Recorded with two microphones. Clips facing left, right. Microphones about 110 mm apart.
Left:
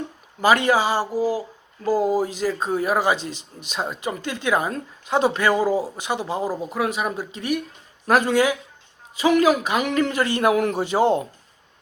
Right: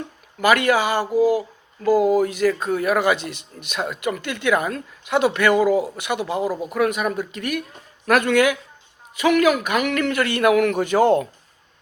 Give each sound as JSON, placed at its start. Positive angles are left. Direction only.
{"t": 0.4, "sound": "speech", "side_deg": 30}
{"t": 1.1, "sound": "speech", "side_deg": -20}
{"t": 2.1, "sound": "a man's voice", "side_deg": 30}